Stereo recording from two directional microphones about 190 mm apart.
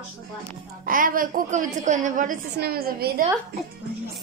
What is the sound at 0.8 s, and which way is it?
A woman's voice, 45° right (ahead or behind).